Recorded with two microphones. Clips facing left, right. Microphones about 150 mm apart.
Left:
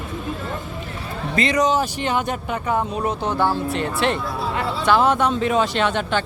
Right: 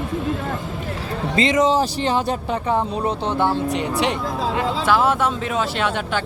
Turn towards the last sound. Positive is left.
turn(degrees=-5)  # may be behind; listen again after turning